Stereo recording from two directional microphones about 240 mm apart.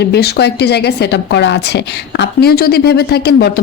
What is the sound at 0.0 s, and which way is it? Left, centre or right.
A woman's voice, left.